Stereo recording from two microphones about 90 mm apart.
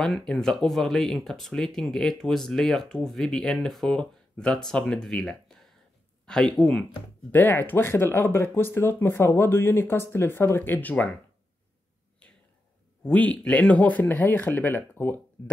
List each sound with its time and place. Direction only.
0.3 s speech: 5° left (ahead or behind)
7.2 s speech: 20° left (ahead or behind)
13.0 s speech: 15° left (ahead or behind)